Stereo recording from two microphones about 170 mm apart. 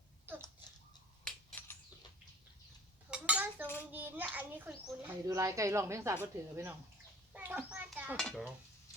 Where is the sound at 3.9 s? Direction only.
10° right (ahead or behind).